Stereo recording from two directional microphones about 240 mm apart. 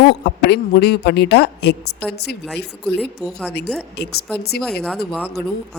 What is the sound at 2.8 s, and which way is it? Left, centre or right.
Speech, centre.